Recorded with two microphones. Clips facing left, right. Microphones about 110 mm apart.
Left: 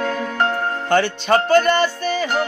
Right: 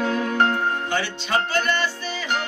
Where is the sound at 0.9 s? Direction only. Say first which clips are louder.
Left 8 dB; 50° left (ahead or behind).